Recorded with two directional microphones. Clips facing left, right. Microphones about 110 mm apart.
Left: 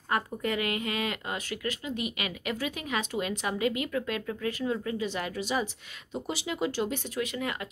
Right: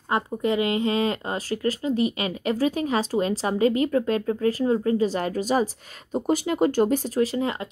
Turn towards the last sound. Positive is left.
turn(degrees=-30)  # may be behind; listen again after turning